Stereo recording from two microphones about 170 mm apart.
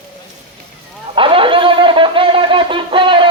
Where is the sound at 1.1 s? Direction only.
30° right (ahead or behind).